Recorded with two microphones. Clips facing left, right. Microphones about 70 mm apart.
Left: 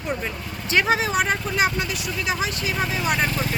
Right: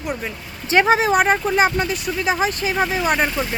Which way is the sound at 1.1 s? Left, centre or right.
Right.